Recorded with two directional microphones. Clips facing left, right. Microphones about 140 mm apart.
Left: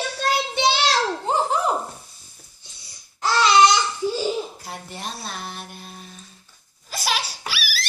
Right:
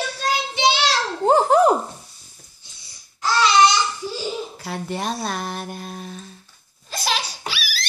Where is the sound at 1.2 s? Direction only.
55° right (ahead or behind).